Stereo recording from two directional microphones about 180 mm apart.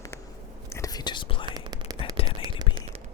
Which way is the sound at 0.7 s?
20° left (ahead or behind).